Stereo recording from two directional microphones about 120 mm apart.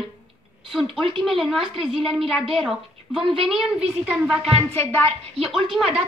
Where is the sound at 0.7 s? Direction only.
Centre (ahead or behind).